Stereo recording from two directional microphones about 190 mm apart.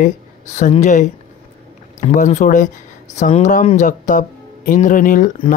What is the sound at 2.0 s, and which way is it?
Speech, 40° left (ahead or behind).